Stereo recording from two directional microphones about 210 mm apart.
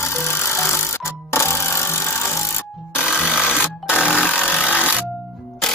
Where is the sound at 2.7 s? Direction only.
5° right (ahead or behind).